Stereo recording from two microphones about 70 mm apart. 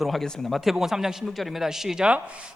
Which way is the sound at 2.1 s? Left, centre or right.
Centre.